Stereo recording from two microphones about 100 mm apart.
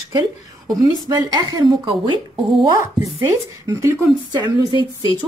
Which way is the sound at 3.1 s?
35° right (ahead or behind).